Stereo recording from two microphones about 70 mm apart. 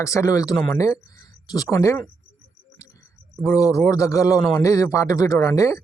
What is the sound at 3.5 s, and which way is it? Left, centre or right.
Speech, left.